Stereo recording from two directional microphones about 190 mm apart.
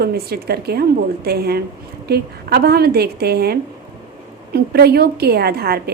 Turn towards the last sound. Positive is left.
turn(degrees=-55)  # may be behind; listen again after turning